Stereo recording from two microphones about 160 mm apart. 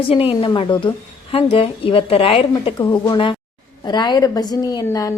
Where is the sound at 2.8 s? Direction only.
20° left (ahead or behind).